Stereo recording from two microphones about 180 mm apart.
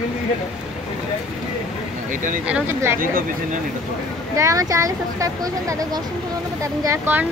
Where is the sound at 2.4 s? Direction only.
10° right (ahead or behind).